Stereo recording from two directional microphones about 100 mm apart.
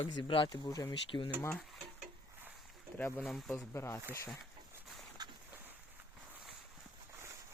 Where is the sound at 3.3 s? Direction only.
Centre (ahead or behind).